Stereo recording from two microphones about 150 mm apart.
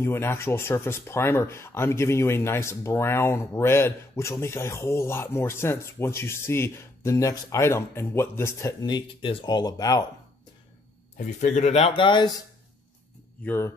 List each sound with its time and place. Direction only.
0.0 s speech: 15° left (ahead or behind)
8.8 s speech: 30° left (ahead or behind)
11.1 s speech: 55° left (ahead or behind); by 12.3 s 35° left (ahead or behind)
13.4 s speech: 10° left (ahead or behind)